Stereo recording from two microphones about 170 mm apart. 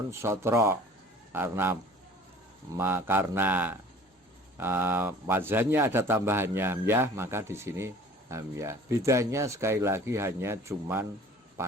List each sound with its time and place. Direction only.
0.1 s speech: 15° right (ahead or behind)